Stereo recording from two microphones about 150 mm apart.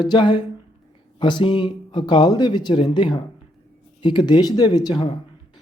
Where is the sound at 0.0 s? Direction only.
30° left (ahead or behind).